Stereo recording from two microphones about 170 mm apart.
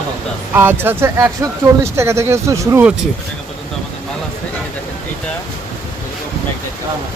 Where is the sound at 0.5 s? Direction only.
10° right (ahead or behind).